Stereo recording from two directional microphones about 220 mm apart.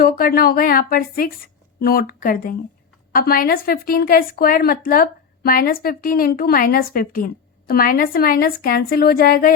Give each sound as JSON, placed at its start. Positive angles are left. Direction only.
{"t": 0.0, "sound": "a woman's voice", "side_deg": 45}